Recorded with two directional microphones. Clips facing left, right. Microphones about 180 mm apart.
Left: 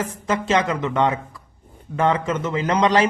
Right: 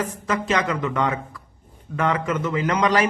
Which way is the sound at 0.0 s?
25° left (ahead or behind).